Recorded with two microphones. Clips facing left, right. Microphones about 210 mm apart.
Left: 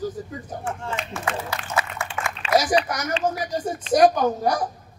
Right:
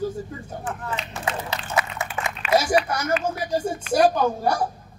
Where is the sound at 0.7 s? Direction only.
25° left (ahead or behind).